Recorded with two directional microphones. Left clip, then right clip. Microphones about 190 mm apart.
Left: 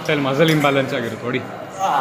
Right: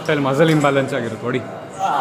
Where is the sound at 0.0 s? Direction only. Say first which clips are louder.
Right 1 dB; 10° right (ahead or behind).